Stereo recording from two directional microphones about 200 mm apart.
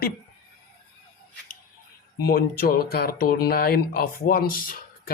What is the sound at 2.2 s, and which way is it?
Speech, 50° left (ahead or behind).